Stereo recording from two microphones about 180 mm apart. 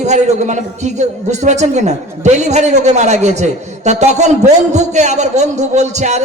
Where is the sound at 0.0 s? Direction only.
40° right (ahead or behind).